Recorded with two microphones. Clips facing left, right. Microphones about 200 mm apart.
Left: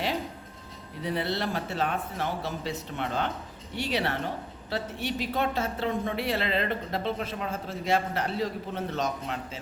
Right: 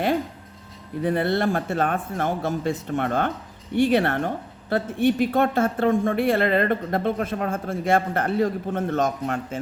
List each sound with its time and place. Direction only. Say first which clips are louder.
1.0 s a woman's voice: right 8 dB; 50° right (ahead or behind)